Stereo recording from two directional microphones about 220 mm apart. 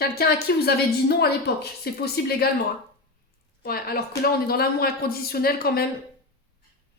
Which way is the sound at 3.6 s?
45° left (ahead or behind).